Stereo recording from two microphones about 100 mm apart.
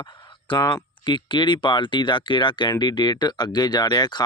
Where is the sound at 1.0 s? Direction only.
50° left (ahead or behind).